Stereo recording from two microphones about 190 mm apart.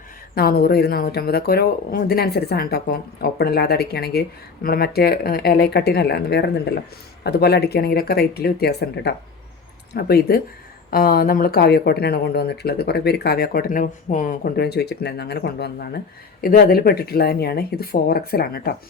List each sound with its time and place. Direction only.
0.3 s speech: 55° left (ahead or behind)